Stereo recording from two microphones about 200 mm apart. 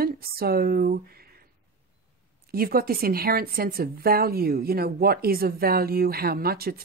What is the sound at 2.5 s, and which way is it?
A woman's voice, 50° right (ahead or behind).